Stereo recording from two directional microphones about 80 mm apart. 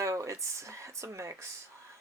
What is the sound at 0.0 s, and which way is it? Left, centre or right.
Speech, right.